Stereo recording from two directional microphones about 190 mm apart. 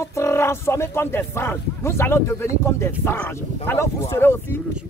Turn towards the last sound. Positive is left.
turn(degrees=15)  # may be behind; listen again after turning